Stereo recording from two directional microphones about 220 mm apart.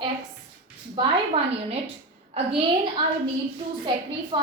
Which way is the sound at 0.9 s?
25° right (ahead or behind).